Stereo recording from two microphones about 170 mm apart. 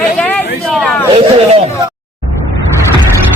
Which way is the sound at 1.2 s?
35° right (ahead or behind).